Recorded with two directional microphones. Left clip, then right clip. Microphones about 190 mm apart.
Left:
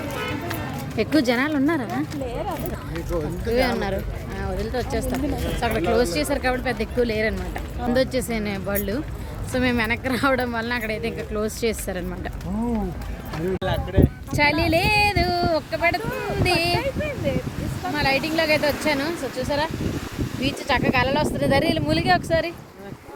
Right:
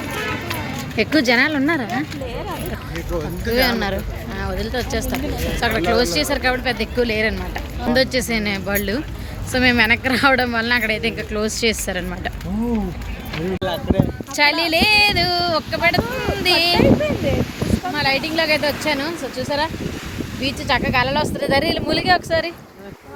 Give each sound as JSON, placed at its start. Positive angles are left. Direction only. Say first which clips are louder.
{"t": 0.9, "sound": "speech", "louder": "right 5 dB", "side_deg": 10}
{"t": 3.4, "sound": "speech", "louder": "right 4 dB", "side_deg": 0}
{"t": 13.6, "sound": "speech", "louder": "right 6 dB", "side_deg": -40}
{"t": 14.3, "sound": "speech", "louder": "right 4 dB", "side_deg": 10}
{"t": 16.7, "sound": "speech", "louder": "right 9 dB", "side_deg": -40}
{"t": 17.9, "sound": "speech", "louder": "right 1 dB", "side_deg": 5}
{"t": 19.5, "sound": "speech", "louder": "right 3 dB", "side_deg": -5}